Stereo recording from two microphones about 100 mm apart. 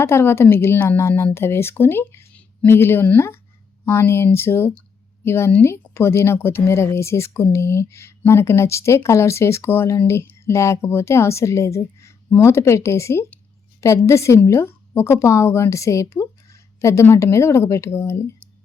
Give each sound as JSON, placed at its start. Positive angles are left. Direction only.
{"t": 0.0, "sound": "a woman's voice", "side_deg": 25}